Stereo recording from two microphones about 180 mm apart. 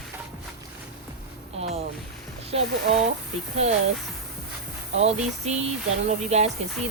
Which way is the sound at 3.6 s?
35° right (ahead or behind).